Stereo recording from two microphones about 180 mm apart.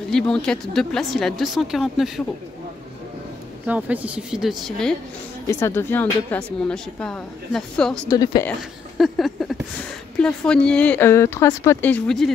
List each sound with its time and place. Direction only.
0.1 s speech: 5° left (ahead or behind)
3.6 s speech: 10° right (ahead or behind)
5.5 s speech: 15° left (ahead or behind)
8.1 s a woman's voice: 20° left (ahead or behind)
8.5 s speech: centre (ahead or behind)